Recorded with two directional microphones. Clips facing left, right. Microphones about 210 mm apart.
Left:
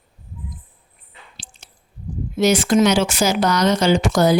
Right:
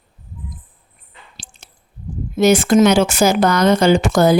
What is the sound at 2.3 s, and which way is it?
A woman's voice, 50° right (ahead or behind).